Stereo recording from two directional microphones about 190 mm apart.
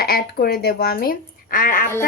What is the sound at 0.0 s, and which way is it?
Speech, 55° left (ahead or behind).